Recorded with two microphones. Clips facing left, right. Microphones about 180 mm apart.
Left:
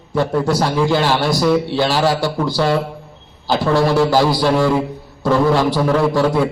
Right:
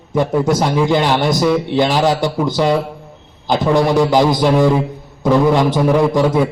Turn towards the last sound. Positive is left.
turn(degrees=-15)  # may be behind; listen again after turning